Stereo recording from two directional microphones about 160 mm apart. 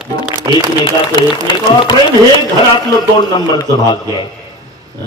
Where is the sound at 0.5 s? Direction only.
20° right (ahead or behind).